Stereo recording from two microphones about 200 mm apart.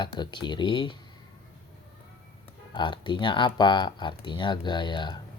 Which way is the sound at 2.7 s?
25° left (ahead or behind).